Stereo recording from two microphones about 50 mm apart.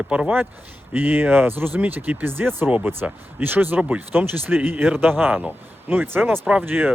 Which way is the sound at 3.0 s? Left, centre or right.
Right.